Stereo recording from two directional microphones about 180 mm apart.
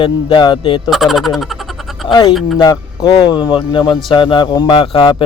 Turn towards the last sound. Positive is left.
turn(degrees=30)  # may be behind; listen again after turning